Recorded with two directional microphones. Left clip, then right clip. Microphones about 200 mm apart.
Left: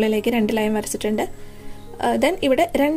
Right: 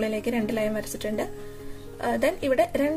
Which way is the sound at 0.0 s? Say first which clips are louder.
Left 7 dB; 40° left (ahead or behind).